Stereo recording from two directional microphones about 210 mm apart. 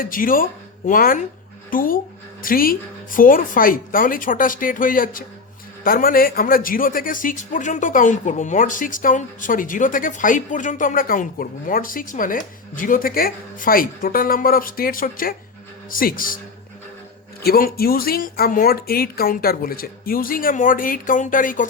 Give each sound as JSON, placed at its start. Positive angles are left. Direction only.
{"t": 0.0, "sound": "a man's voice", "side_deg": 40}
{"t": 17.4, "sound": "speech", "side_deg": 45}